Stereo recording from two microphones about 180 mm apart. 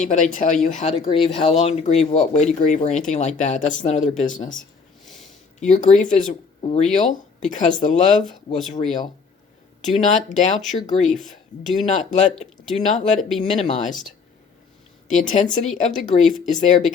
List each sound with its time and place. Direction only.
0.0 s speech: 45° left (ahead or behind)
5.0 s a sound: centre (ahead or behind)
5.5 s speech: 45° left (ahead or behind)
9.8 s speech: 40° left (ahead or behind)
11.6 s speech: centre (ahead or behind)
11.9 s speech: 40° left (ahead or behind)
13.1 s speech: centre (ahead or behind)
13.4 s speech: 40° left (ahead or behind)
15.1 s speech: 45° left (ahead or behind)